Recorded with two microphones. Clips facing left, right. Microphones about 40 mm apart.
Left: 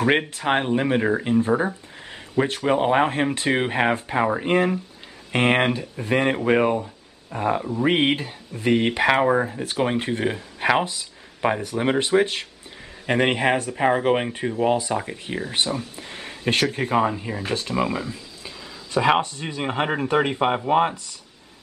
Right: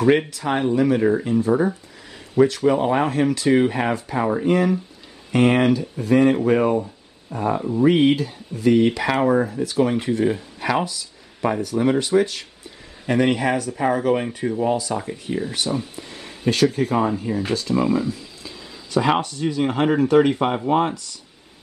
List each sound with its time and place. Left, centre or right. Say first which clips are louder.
0.3 s speech: even; left; by 17.4 s centre
17.5 s speech: right 1 dB; left
17.8 s a sound: right 6 dB; left
19.2 s speech: right 6 dB; left